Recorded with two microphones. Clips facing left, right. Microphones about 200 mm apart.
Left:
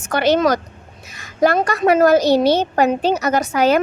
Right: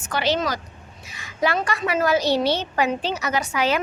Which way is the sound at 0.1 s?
55° left (ahead or behind).